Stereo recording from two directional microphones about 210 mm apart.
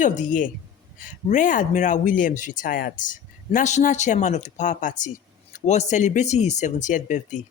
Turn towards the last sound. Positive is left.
turn(degrees=35)  # may be behind; listen again after turning